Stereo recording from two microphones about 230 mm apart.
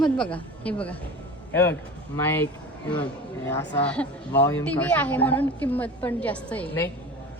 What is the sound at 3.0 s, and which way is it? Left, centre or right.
Speech, centre.